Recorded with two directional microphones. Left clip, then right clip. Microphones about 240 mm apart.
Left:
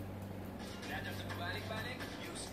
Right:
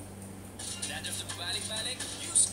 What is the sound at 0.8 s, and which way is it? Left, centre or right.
Vehicle, right.